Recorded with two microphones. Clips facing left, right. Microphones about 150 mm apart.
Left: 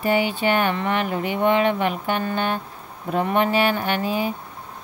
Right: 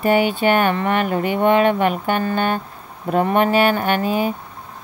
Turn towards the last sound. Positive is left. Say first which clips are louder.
# right 4 dB
turn(degrees=-55)  # may be behind; listen again after turning